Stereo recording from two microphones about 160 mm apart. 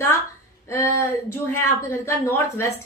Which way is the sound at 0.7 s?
15° left (ahead or behind).